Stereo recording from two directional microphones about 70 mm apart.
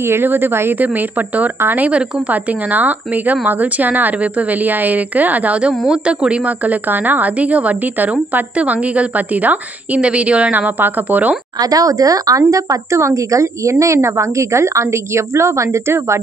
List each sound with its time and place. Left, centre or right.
0.0 s a woman's voice: right
1.9 s a woman's voice: centre
11.6 s speech: right